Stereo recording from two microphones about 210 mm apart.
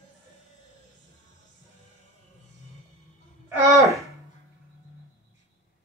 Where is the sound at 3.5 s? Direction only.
15° right (ahead or behind).